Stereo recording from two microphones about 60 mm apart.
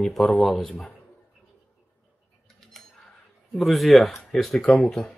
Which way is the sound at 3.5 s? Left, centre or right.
Centre.